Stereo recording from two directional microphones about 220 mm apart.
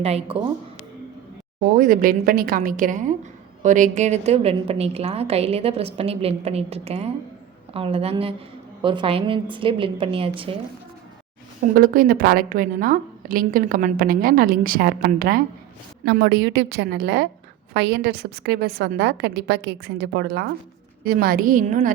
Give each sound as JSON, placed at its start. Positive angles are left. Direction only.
{"t": 0.0, "sound": "a woman's voice", "side_deg": -30}
{"t": 1.8, "sound": "a woman's voice", "side_deg": -40}
{"t": 11.7, "sound": "a woman's voice", "side_deg": -40}